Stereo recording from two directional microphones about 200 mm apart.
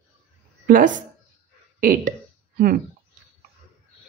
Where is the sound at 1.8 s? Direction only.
45° right (ahead or behind).